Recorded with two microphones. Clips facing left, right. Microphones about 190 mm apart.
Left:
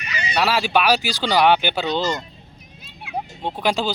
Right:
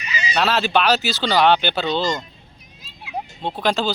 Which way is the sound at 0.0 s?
60° left (ahead or behind).